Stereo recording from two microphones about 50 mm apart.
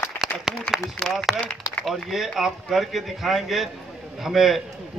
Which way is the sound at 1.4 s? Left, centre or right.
Left.